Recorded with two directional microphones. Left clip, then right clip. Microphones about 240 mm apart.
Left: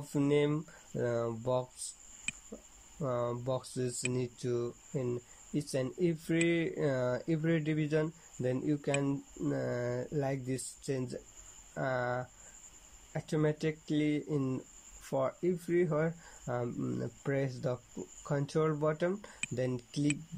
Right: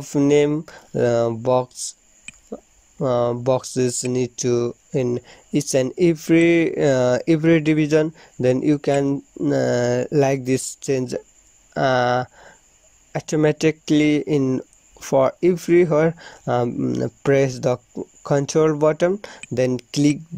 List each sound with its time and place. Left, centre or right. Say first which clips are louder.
0.1 s speech: right 14 dB; right
2.3 s a sound: even; centre
3.0 s speech: right 15 dB; right